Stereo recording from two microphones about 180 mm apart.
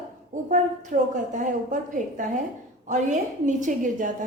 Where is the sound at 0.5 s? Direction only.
45° right (ahead or behind).